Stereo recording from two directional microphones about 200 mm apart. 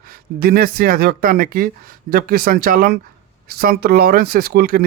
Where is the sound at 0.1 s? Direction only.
50° right (ahead or behind).